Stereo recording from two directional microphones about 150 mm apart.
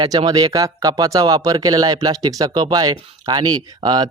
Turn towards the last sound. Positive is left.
turn(degrees=-25)  # may be behind; listen again after turning